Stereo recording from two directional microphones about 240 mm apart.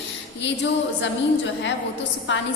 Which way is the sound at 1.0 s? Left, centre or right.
Left.